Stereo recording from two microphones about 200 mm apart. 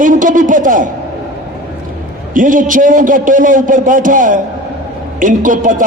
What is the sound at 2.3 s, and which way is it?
A man's voice, 40° right (ahead or behind).